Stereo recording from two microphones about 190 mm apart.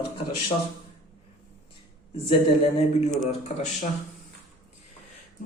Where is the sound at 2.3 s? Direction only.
30° left (ahead or behind).